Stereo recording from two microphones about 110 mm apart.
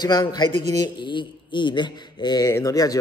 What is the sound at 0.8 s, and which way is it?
A man's voice, 45° left (ahead or behind).